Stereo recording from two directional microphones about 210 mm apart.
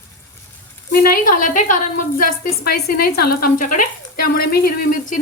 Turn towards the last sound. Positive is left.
turn(degrees=45)  # may be behind; listen again after turning